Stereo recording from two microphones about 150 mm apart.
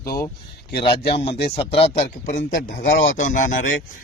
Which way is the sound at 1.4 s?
40° left (ahead or behind).